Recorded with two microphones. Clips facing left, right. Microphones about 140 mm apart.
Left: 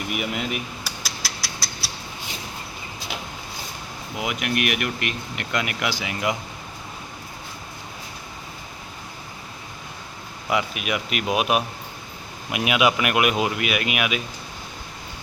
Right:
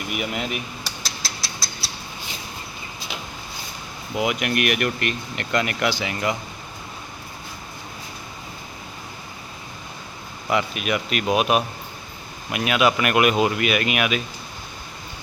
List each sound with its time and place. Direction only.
0.1 s a sound: centre (ahead or behind)
4.2 s speech: centre (ahead or behind)
10.5 s speech: 10° left (ahead or behind)